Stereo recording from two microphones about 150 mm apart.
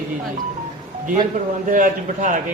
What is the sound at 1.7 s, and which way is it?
Speech, 60° right (ahead or behind).